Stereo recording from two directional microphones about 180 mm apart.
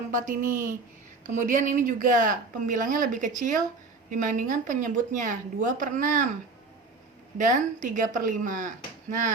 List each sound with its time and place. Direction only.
0.1 s speech: 45° right (ahead or behind)
7.3 s speech: 45° right (ahead or behind)